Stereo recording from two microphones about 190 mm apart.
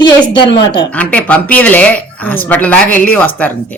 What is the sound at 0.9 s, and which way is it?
Speech, 5° left (ahead or behind).